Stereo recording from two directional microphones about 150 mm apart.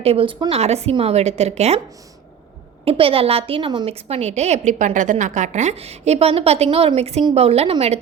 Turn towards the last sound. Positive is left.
turn(degrees=-45)  # may be behind; listen again after turning